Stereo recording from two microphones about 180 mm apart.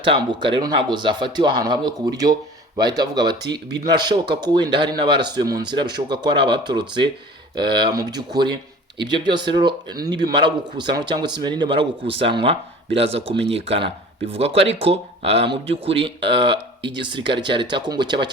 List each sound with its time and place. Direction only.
0.0 s speech: 25° right (ahead or behind)